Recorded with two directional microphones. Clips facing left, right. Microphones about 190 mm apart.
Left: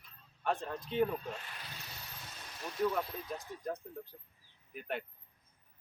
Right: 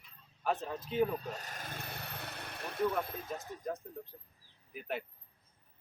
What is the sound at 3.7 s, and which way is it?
Speech, centre (ahead or behind).